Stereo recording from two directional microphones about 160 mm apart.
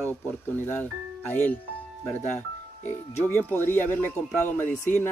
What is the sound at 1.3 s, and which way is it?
Speech, 10° left (ahead or behind).